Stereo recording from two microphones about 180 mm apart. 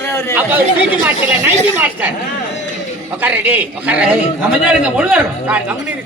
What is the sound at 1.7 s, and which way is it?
Speech, 10° right (ahead or behind).